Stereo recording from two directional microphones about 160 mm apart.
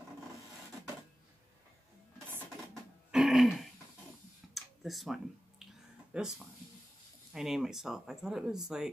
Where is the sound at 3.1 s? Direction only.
5° right (ahead or behind).